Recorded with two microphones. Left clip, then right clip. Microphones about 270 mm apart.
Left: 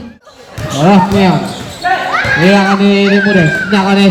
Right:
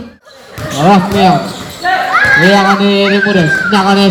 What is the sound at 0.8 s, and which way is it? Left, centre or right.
Speech, right.